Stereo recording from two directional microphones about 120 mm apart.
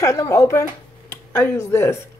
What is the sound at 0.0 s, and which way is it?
Speech, 25° left (ahead or behind).